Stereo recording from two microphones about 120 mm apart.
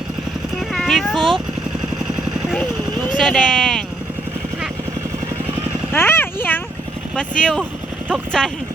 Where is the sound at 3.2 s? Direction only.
5° left (ahead or behind).